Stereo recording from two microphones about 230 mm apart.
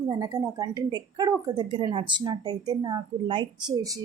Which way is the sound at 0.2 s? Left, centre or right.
Centre.